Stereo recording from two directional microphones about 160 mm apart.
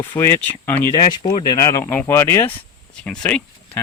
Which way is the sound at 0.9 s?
30° left (ahead or behind).